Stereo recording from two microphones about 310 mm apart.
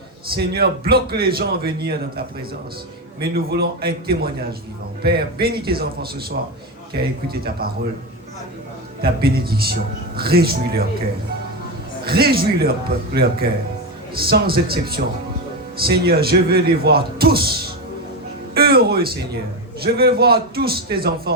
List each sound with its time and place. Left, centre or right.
0.3 s speech: right
9.0 s speech: right
12.0 s speech: right
18.5 s music: right
19.8 s speech: right